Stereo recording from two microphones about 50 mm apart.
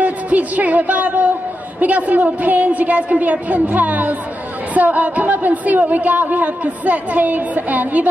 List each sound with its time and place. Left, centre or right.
0.0 s music: right
1.8 s a woman's voice: right